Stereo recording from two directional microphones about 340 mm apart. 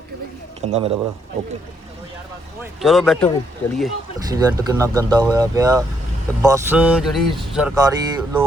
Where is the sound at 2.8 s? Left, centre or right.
Centre.